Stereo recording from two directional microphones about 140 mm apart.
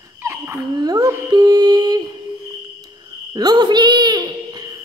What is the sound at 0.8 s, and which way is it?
Music, 30° right (ahead or behind).